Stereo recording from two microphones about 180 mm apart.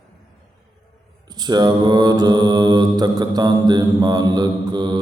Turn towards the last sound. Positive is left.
turn(degrees=-25)  # may be behind; listen again after turning